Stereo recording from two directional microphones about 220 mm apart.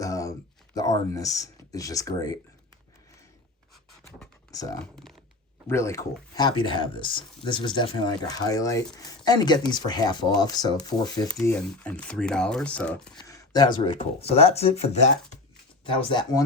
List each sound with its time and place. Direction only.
0.0 s a sound: 15° left (ahead or behind)
1.1 s speech: 15° left (ahead or behind)
4.5 s speech: 15° left (ahead or behind)
4.8 s speech: 5° left (ahead or behind); by 11.3 s 20° left (ahead or behind)
11.3 s speech: 5° left (ahead or behind)
13.1 s speech: 15° left (ahead or behind)